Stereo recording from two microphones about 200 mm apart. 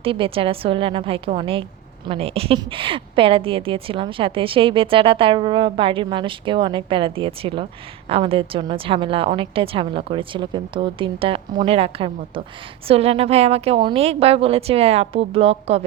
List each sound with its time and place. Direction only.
0.0 s a woman's voice: 25° right (ahead or behind)